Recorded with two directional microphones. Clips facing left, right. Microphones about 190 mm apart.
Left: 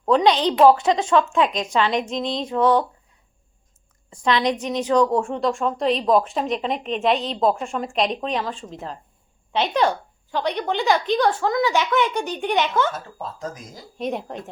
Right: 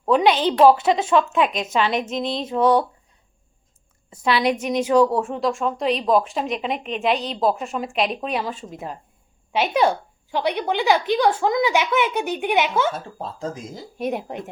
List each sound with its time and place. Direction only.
0.0 s a woman's voice: 5° right (ahead or behind)
4.1 s a woman's voice: 10° right (ahead or behind)
12.9 s speech: 30° right (ahead or behind)
14.0 s a woman's voice: 10° right (ahead or behind)